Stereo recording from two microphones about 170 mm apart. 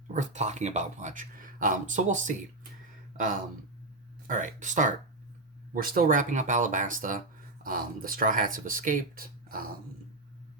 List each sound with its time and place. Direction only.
0.1 s speech: 45° right (ahead or behind)
4.3 s speech: 50° right (ahead or behind)
5.7 s speech: 60° right (ahead or behind)